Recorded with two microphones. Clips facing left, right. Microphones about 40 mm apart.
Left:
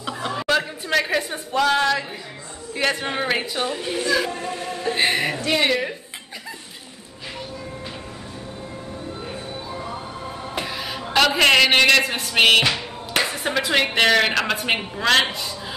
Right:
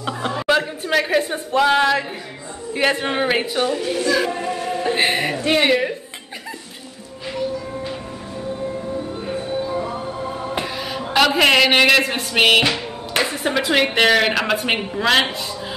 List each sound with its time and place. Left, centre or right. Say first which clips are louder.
0.3 s a sound: right 3 dB; centre
2.7 s a woman's voice: right 4 dB; centre
4.0 s music: right 2 dB; centre
4.3 s music: right 5 dB; centre
5.6 s a woman's voice: right 5 dB; centre
9.2 s music: right 8 dB; centre
10.6 s a man's voice: right 3 dB; centre